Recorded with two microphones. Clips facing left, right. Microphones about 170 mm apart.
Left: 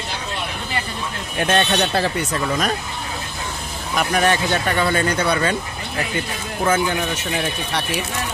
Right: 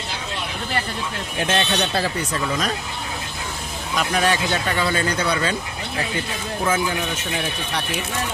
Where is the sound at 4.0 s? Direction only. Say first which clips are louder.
Left 2 dB; 50° left (ahead or behind).